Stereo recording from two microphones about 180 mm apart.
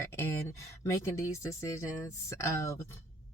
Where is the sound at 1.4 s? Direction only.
15° left (ahead or behind).